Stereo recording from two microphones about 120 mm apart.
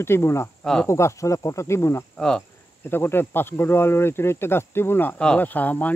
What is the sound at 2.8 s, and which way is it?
Speech, 20° left (ahead or behind).